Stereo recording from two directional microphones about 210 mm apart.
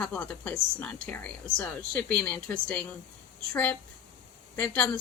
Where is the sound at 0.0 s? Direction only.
5° left (ahead or behind).